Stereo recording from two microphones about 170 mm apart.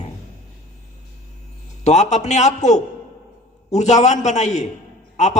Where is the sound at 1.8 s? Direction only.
40° left (ahead or behind).